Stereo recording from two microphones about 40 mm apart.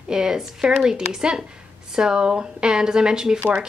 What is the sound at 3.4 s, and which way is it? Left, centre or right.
Speech, right.